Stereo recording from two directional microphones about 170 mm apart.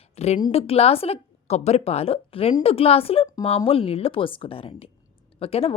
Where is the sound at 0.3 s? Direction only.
30° left (ahead or behind).